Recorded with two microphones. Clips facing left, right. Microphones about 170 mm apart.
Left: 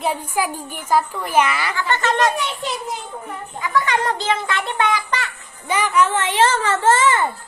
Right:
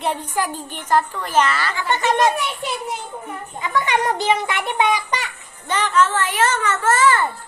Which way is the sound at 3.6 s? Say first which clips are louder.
Even; 20° right (ahead or behind).